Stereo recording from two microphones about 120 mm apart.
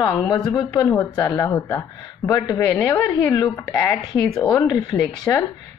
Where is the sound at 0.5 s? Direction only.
30° left (ahead or behind).